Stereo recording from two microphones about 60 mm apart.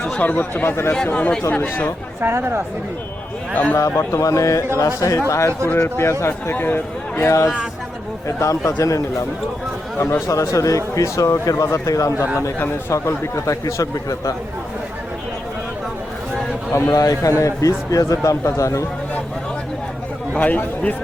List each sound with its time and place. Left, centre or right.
0.2 s speech: left
1.0 s speech: left
2.2 s speech: right
3.5 s speech: left
3.8 s a man's voice: left
6.5 s a man's voice: left
7.3 s speech: left
10.0 s a man's voice: left
10.2 s speech: left
12.9 s speech: left
16.9 s a man's voice: left
17.3 s speech: left
20.3 s speech: left